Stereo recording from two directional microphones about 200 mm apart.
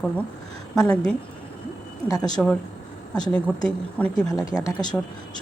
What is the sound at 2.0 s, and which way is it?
Speech, 20° left (ahead or behind).